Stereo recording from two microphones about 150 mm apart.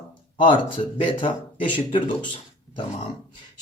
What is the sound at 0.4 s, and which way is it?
Speech, 35° left (ahead or behind).